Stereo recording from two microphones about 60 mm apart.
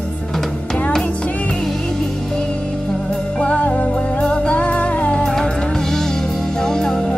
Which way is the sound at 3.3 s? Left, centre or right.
Left.